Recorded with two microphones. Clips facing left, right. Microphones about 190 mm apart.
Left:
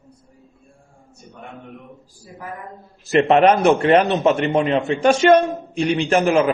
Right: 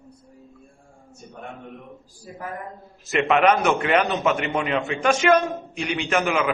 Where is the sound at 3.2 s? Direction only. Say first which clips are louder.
Left 4 dB; 35° left (ahead or behind).